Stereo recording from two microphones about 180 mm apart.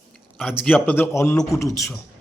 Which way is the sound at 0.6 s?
10° left (ahead or behind).